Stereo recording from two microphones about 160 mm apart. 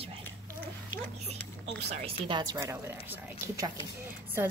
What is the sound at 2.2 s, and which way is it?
Speech, 30° right (ahead or behind).